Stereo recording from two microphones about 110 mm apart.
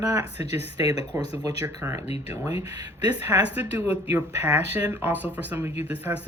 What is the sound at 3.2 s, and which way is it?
Speech, 15° right (ahead or behind).